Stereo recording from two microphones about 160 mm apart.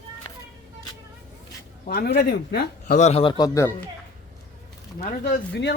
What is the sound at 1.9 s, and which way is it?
Speech, 80° left.